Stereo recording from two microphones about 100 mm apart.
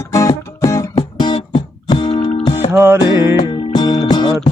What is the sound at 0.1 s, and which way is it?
Music, 30° left (ahead or behind).